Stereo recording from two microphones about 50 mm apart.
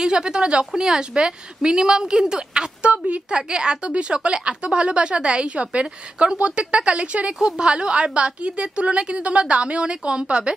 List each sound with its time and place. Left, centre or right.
0.0 s a woman's voice: centre